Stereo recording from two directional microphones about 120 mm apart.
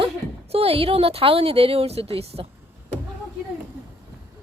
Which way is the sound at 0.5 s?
55° right (ahead or behind).